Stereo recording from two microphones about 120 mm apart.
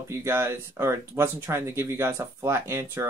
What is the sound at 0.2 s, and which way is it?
Speech, 20° right (ahead or behind).